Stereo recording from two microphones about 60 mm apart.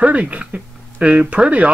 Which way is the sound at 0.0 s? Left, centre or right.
Right.